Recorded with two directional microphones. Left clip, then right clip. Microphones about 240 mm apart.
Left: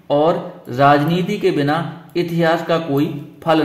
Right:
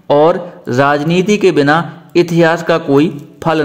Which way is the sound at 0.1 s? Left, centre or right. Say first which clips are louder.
Right 6 dB; right.